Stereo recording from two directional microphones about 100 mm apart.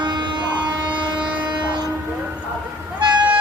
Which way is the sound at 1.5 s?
50° right (ahead or behind).